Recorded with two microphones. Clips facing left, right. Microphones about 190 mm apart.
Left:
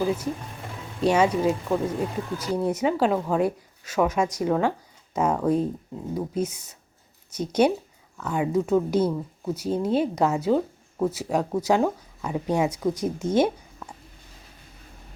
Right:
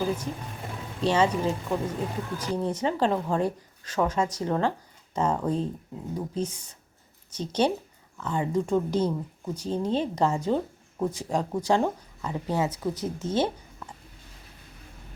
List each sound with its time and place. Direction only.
1.0 s speech: 10° left (ahead or behind)